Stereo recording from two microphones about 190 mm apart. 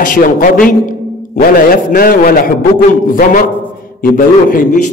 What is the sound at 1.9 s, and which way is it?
A man's voice, 50° left (ahead or behind).